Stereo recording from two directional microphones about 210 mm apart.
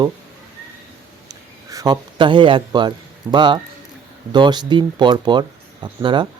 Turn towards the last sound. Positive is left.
turn(degrees=-20)  # may be behind; listen again after turning